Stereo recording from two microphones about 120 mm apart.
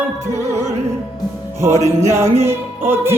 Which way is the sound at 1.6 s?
25° right (ahead or behind).